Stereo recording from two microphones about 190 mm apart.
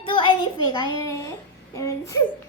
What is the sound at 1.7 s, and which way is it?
Speech, 15° left (ahead or behind).